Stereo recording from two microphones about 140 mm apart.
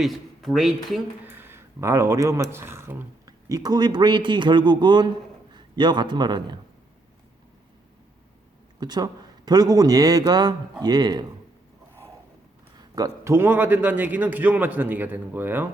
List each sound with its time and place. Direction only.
0.0 s speech: centre (ahead or behind)
1.2 s a man's voice: 15° right (ahead or behind); by 6.6 s 30° right (ahead or behind)
8.8 s speech: 30° right (ahead or behind)
13.0 s a man's voice: 20° right (ahead or behind)